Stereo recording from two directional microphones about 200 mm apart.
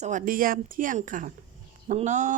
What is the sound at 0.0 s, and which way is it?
A woman's voice, 40° right (ahead or behind).